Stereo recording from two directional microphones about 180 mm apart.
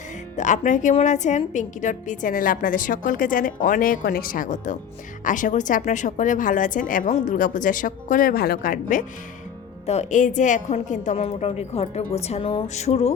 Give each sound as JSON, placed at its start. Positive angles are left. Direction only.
{"t": 0.3, "sound": "a woman's voice", "side_deg": 45}